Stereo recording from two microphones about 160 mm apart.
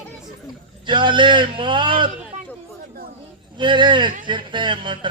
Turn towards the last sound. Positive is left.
turn(degrees=-30)  # may be behind; listen again after turning